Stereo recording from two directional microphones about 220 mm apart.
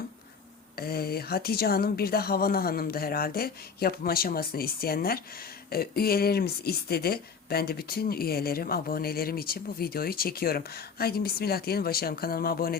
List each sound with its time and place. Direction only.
0.8 s speech: 45° left (ahead or behind)